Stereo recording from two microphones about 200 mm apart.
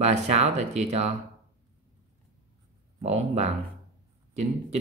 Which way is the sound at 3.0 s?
35° right (ahead or behind).